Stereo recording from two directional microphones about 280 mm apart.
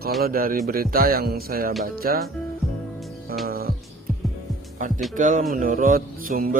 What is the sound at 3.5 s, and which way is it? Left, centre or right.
Music, right.